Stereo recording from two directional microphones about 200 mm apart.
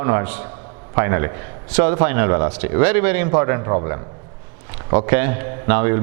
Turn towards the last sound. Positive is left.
turn(degrees=-15)  # may be behind; listen again after turning